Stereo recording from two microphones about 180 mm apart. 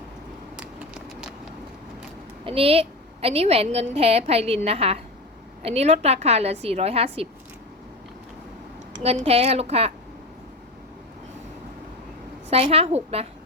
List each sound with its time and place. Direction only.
2.4 s a woman's voice: 35° right (ahead or behind)
9.0 s a woman's voice: 35° right (ahead or behind)
12.5 s a woman's voice: 35° right (ahead or behind)